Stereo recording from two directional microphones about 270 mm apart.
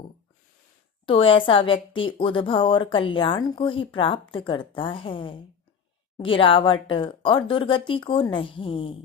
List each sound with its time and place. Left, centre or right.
1.0 s a woman's voice: centre